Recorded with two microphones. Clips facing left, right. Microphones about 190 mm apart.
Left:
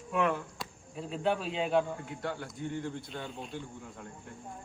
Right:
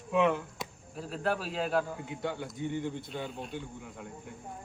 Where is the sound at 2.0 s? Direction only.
20° right (ahead or behind).